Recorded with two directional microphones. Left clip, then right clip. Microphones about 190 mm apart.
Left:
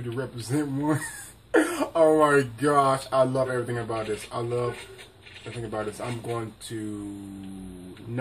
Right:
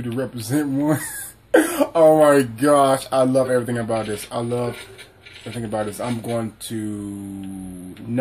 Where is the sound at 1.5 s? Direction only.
50° right (ahead or behind).